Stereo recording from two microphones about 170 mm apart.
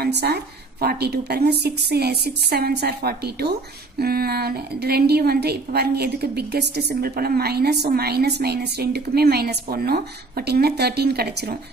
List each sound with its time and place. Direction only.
0.0 s a woman's voice: 70° right (ahead or behind)